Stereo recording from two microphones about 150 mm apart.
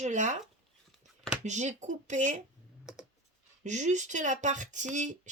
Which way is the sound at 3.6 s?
50° right (ahead or behind).